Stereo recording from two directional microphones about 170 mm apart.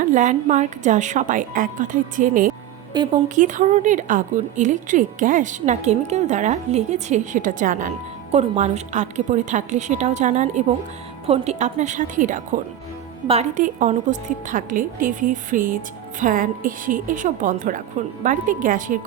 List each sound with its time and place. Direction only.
0.0 s a woman's voice: 45° right (ahead or behind)
13.2 s a woman's voice: 35° right (ahead or behind)
13.6 s a woman's voice: 50° right (ahead or behind)